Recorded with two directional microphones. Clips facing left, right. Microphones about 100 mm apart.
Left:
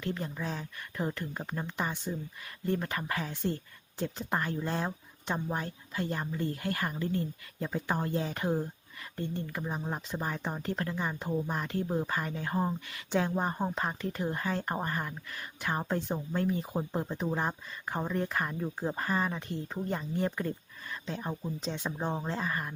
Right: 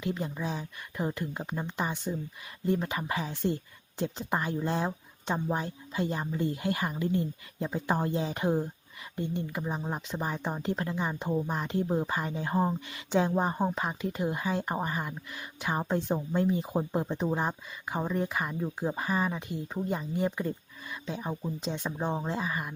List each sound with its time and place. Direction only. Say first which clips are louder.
0.0 s speech: right 2 dB; 15° right (ahead or behind)
17.5 s speech: right 1 dB; 5° right (ahead or behind)